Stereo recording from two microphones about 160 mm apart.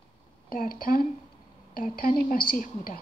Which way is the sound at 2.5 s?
60° left (ahead or behind).